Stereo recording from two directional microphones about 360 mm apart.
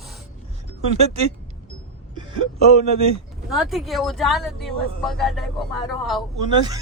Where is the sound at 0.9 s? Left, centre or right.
Centre.